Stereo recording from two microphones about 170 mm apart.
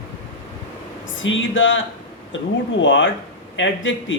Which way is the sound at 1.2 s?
90° left.